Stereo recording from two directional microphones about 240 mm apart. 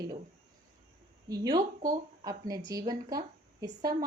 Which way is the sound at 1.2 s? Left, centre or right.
Centre.